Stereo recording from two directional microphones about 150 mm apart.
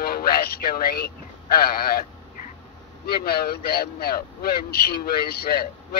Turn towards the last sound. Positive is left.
turn(degrees=90)